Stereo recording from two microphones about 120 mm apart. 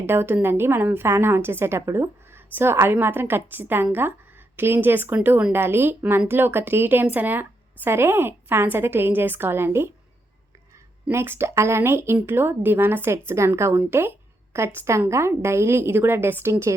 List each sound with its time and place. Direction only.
0.0 s a woman's voice: 20° right (ahead or behind)
11.1 s a woman's voice: 20° right (ahead or behind)